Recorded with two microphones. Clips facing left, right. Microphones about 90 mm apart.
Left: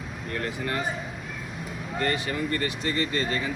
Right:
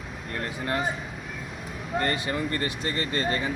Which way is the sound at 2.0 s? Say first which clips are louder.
Even; 35° right (ahead or behind).